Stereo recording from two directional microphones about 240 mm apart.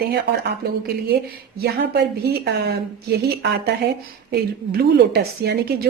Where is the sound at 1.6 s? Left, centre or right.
Right.